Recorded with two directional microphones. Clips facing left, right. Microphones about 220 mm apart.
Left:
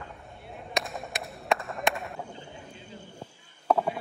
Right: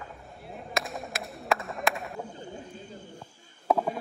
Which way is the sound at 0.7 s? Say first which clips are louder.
Even; centre (ahead or behind).